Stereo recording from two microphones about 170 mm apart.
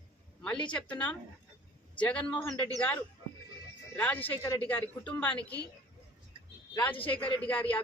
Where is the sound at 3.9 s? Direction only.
10° left (ahead or behind).